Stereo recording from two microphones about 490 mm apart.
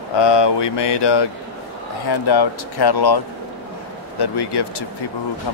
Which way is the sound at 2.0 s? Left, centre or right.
Left.